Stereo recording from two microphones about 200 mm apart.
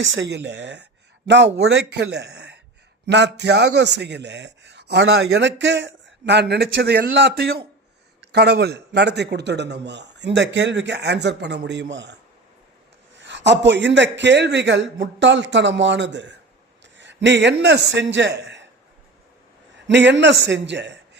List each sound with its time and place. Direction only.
0.0 s a man's voice: 70° right (ahead or behind)
19.9 s a man's voice: 60° right (ahead or behind)